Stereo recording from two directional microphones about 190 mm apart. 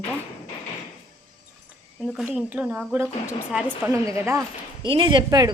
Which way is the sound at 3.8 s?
15° right (ahead or behind).